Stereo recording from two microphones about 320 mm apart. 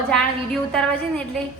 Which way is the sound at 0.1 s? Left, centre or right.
Centre.